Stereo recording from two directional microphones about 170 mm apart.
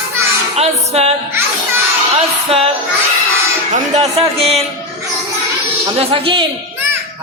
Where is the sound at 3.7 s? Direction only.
45° right (ahead or behind).